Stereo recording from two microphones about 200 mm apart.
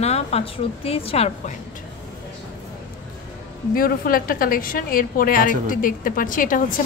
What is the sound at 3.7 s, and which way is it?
A woman's voice, 45° left (ahead or behind).